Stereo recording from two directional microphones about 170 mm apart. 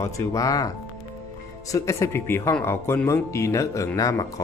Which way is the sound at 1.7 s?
15° left (ahead or behind).